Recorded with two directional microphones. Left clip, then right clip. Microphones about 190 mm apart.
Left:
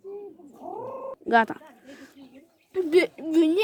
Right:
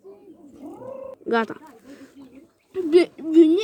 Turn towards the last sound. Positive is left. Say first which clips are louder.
# right 6 dB
turn(degrees=40)  # may be behind; listen again after turning